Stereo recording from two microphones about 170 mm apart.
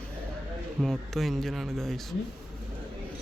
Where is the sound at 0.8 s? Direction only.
Centre (ahead or behind).